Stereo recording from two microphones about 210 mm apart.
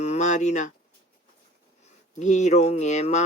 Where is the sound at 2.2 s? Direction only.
35° left (ahead or behind).